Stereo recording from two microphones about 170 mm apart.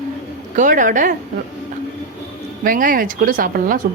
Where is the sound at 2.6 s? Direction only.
55° right (ahead or behind).